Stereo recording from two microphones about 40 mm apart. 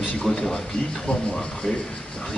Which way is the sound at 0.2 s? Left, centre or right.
Centre.